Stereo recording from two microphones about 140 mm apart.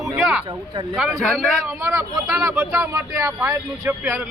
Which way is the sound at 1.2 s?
5° left (ahead or behind).